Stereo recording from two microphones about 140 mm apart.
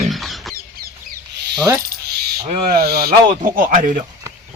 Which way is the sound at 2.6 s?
90° right.